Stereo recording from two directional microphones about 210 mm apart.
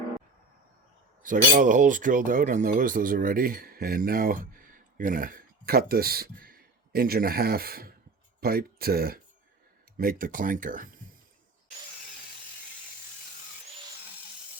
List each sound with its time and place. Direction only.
1.2 s speech: 40° right (ahead or behind)